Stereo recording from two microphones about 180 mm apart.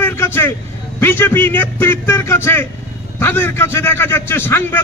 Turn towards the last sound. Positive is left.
turn(degrees=10)  # may be behind; listen again after turning